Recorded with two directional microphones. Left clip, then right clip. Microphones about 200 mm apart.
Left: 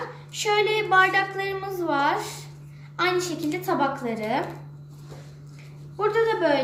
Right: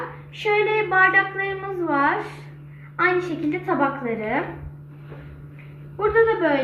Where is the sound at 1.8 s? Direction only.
5° left (ahead or behind).